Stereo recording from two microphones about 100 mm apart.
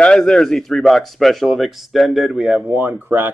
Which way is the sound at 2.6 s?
20° right (ahead or behind).